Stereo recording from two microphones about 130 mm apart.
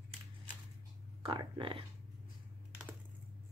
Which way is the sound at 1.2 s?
40° right (ahead or behind).